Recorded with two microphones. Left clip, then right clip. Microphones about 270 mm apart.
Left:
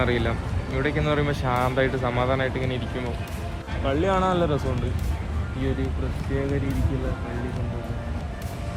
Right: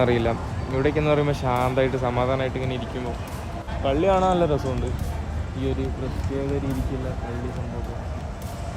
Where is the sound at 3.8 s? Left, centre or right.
Centre.